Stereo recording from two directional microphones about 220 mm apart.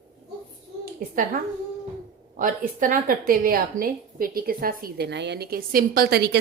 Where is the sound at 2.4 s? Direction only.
40° right (ahead or behind).